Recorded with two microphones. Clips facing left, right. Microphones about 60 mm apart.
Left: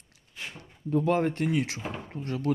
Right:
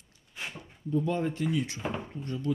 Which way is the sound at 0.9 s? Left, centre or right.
Left.